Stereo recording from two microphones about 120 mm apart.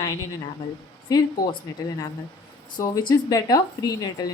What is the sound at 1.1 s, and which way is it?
Speech, 35° left (ahead or behind).